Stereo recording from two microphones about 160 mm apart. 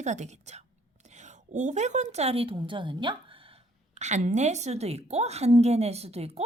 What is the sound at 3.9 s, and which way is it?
A woman's voice, 45° right (ahead or behind).